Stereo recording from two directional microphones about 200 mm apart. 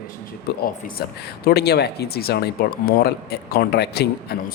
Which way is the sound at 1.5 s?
55° left (ahead or behind).